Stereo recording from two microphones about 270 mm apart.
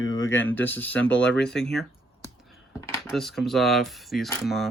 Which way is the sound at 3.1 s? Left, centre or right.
Centre.